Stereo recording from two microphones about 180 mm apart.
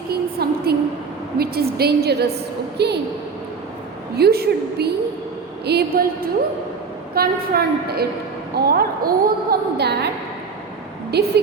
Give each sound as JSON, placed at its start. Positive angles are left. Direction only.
{"t": 0.1, "sound": "a sound", "side_deg": -60}
{"t": 1.4, "sound": "a woman's voice", "side_deg": -60}
{"t": 4.2, "sound": "a woman's voice", "side_deg": -60}
{"t": 7.1, "sound": "a woman's voice", "side_deg": -55}
{"t": 11.1, "sound": "a woman's voice", "side_deg": -65}